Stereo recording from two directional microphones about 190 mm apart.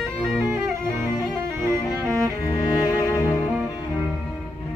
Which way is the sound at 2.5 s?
20° left (ahead or behind).